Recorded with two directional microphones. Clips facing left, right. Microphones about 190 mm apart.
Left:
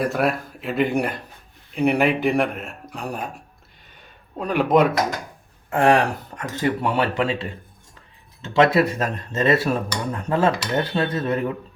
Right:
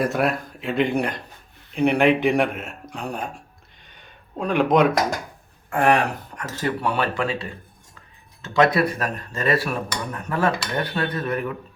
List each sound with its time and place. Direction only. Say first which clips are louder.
0.0 s speech: even; centre (ahead or behind)
4.4 s speech: even; 5° left (ahead or behind)
5.7 s speech: left 2 dB; 25° left (ahead or behind)
8.5 s speech: left 2 dB; 25° left (ahead or behind)